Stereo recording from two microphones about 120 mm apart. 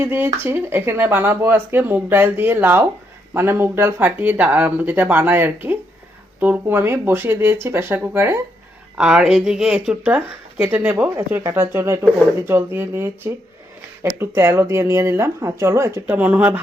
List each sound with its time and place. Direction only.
0.0 s speech: 15° right (ahead or behind)
9.0 s speech: 5° right (ahead or behind)